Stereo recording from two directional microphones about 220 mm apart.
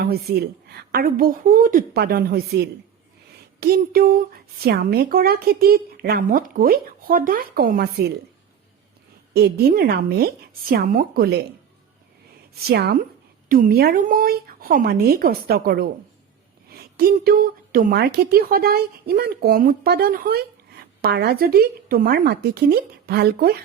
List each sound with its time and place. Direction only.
0.1 s a woman's voice: 45° right (ahead or behind)
9.3 s a woman's voice: 45° right (ahead or behind)
12.6 s a woman's voice: 50° right (ahead or behind)